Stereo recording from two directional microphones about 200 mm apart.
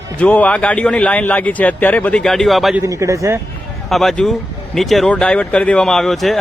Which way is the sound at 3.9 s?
Centre (ahead or behind).